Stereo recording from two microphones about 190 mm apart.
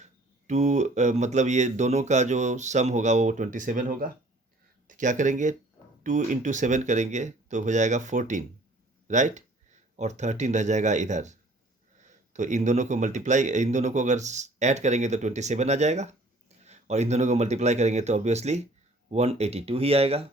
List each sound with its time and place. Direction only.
0.0 s speech: 35° right (ahead or behind)